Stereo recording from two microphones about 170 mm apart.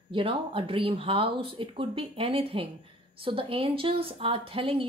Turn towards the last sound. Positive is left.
turn(degrees=-35)  # may be behind; listen again after turning